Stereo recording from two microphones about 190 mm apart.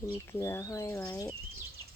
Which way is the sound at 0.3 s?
15° left (ahead or behind).